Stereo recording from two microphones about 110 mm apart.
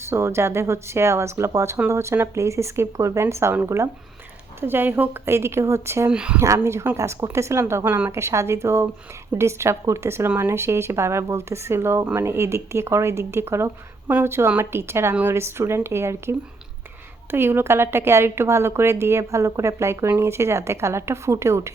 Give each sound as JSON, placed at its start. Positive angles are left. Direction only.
{"t": 0.0, "sound": "a woman's voice", "side_deg": -25}
{"t": 6.1, "sound": "speech", "side_deg": -10}
{"t": 6.4, "sound": "a woman's voice", "side_deg": -25}
{"t": 17.3, "sound": "a woman's voice", "side_deg": -20}